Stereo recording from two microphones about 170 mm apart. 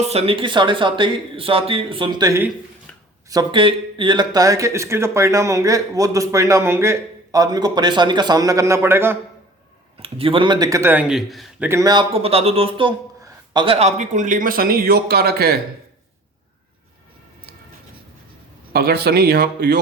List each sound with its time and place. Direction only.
0.0 s speech: 35° right (ahead or behind)
2.9 s a sound: 5° left (ahead or behind)
3.2 s speech: 25° right (ahead or behind)
10.0 s a man's voice: 35° right (ahead or behind); by 11.7 s centre (ahead or behind)
11.7 s speech: 20° right (ahead or behind)
13.2 s a sound: 25° right (ahead or behind)
13.7 s speech: 40° right (ahead or behind); by 15.6 s 65° right (ahead or behind)
18.7 s a man's voice: 70° right (ahead or behind)